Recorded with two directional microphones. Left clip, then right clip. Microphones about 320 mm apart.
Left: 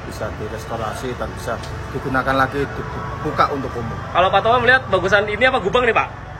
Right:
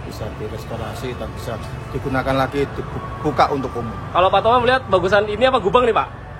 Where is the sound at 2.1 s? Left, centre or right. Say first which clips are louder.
Left 2 dB; centre.